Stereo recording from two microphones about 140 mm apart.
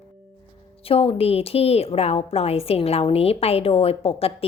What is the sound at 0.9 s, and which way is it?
A woman's voice, 45° left (ahead or behind).